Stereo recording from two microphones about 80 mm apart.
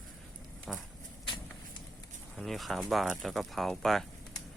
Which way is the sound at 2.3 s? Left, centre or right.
Centre.